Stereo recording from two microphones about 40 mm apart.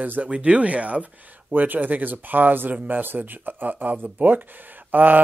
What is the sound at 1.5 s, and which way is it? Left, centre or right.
Speech, right.